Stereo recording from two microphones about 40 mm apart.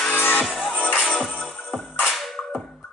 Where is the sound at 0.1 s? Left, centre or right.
Left.